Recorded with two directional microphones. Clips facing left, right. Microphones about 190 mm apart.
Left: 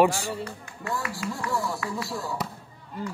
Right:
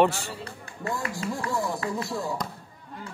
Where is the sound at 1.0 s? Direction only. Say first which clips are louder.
Right 1 dB; 35° right (ahead or behind).